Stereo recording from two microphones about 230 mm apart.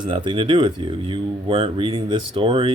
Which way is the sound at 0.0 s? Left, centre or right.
Right.